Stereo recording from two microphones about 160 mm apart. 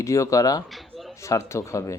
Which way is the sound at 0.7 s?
Centre (ahead or behind).